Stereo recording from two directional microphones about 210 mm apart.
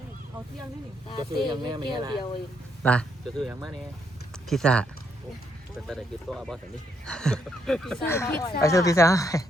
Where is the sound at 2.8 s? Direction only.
5° left (ahead or behind).